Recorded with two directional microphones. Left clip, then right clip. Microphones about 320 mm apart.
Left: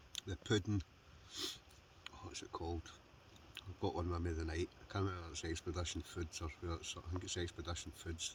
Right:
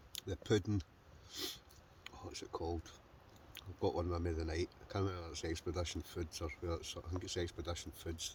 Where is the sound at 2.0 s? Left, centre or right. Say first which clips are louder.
Right 1 dB; centre.